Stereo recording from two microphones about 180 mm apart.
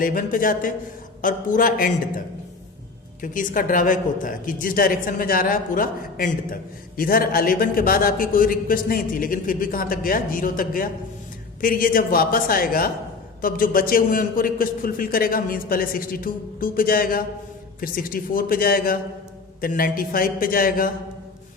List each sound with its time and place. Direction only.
0.0 s a woman's voice: 50° left (ahead or behind)
3.2 s a woman's voice: 50° left (ahead or behind)